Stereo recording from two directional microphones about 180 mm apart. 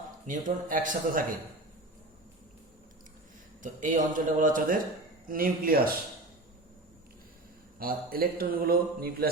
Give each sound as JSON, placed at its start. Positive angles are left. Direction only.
{"t": 0.3, "sound": "speech", "side_deg": -45}
{"t": 3.6, "sound": "speech", "side_deg": -45}
{"t": 7.8, "sound": "a man's voice", "side_deg": -55}